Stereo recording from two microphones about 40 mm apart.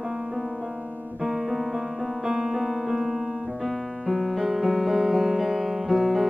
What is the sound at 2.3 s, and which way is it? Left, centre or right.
Music, centre.